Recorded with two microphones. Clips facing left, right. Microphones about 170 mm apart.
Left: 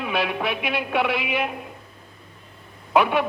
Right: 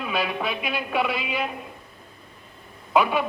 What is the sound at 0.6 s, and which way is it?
Speech, 75° left (ahead or behind).